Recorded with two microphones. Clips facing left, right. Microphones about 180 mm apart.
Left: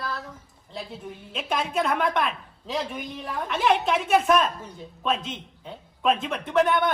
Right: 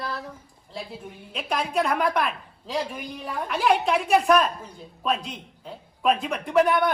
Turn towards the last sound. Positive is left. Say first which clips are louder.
# right 1 dB
turn(degrees=0)  # may be behind; listen again after turning